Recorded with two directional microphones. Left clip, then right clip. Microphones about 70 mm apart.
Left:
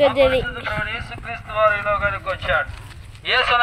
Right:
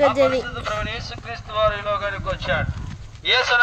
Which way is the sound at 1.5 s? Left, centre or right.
Centre.